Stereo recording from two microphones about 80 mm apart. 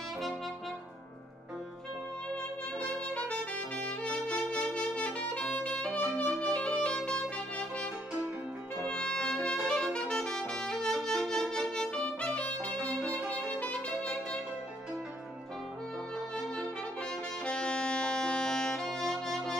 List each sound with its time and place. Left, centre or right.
2.8 s saxophone: centre
8.8 s brass instrument: centre
9.7 s saxophone: centre
17.5 s music: centre